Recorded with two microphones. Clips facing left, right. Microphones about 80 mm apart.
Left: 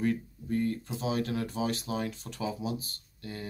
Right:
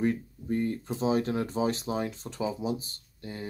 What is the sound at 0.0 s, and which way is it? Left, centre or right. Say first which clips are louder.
Speech: right 2 dB; right.